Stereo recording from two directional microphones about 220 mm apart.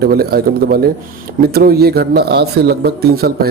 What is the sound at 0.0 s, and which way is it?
Speech, 45° right (ahead or behind).